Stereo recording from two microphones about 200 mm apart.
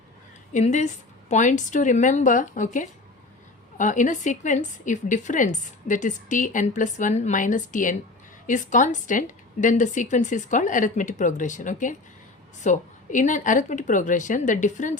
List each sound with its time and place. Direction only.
0.5 s a woman's voice: 35° left (ahead or behind)